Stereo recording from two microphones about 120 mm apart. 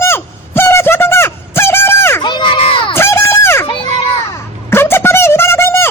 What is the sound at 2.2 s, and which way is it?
Crowd, 40° left (ahead or behind).